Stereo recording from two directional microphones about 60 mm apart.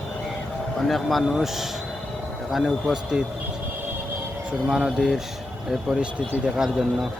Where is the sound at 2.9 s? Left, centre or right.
Centre.